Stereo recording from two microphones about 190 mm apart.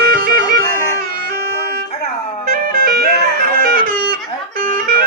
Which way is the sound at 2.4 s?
50° right (ahead or behind).